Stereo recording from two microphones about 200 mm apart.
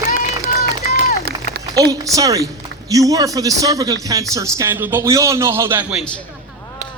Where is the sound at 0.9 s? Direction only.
50° right (ahead or behind).